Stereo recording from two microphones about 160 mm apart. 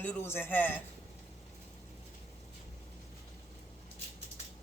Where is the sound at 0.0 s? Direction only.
10° left (ahead or behind).